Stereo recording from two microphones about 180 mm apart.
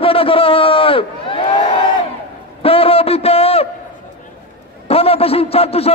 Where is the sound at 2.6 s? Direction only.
30° left (ahead or behind).